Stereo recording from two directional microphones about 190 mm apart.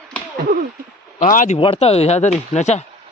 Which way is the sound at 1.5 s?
30° left (ahead or behind).